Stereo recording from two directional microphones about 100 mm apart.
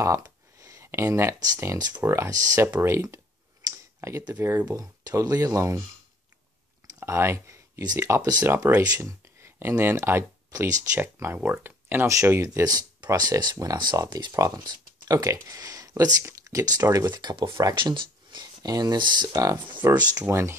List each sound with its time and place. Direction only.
0.6 s speech: 30° right (ahead or behind)
4.3 s speech: 25° right (ahead or behind)
4.6 s speech: 40° right (ahead or behind)
7.0 s a sound: 25° right (ahead or behind)
7.8 s speech: 30° right (ahead or behind)
8.2 s speech: 45° right (ahead or behind)
8.5 s speech: 25° right (ahead or behind)
12.6 s speech: 40° right (ahead or behind)
19.8 s speech: 25° right (ahead or behind)